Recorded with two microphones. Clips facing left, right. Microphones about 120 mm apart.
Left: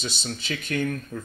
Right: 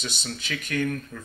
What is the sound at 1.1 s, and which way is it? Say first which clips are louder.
Speech: left 5 dB; 25° left (ahead or behind).